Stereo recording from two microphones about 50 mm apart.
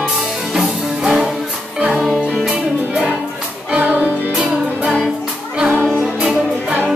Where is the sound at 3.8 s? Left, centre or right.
Right.